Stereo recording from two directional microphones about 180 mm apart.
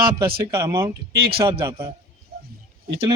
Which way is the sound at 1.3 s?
30° right (ahead or behind).